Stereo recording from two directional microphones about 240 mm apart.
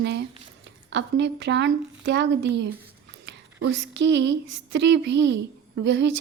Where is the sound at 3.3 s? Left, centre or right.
Right.